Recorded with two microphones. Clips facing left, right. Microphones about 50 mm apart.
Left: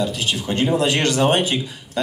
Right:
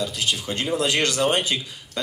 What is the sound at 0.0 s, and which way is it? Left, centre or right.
Speech, centre.